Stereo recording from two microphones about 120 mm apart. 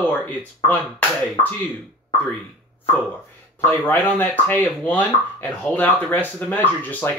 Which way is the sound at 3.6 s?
15° left (ahead or behind).